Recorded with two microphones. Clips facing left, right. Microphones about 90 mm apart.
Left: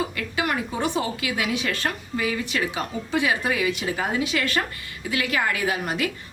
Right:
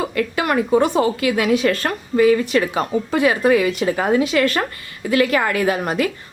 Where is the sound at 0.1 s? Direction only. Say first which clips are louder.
Right 7 dB; 50° right (ahead or behind).